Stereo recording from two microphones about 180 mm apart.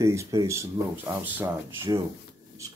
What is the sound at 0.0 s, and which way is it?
Speech, 15° right (ahead or behind).